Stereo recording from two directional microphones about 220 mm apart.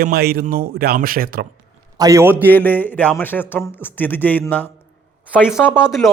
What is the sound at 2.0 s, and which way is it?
Speech, 15° right (ahead or behind).